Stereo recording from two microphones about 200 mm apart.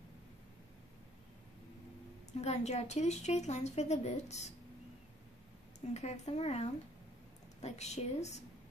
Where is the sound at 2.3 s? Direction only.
35° left (ahead or behind).